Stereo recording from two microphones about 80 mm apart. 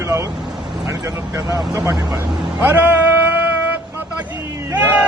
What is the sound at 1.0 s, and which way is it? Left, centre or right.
Speech, right.